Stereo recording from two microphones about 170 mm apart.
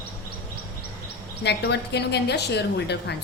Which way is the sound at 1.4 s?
80° left.